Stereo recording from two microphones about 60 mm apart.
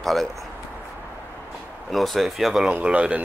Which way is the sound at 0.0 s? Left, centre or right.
Centre.